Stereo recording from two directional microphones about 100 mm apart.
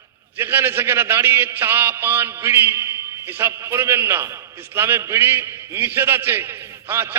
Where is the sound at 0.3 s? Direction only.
25° right (ahead or behind).